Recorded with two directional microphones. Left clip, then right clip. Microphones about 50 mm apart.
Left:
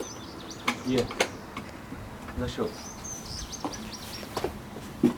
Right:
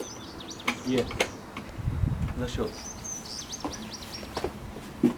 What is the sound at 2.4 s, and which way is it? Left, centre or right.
Speech, centre.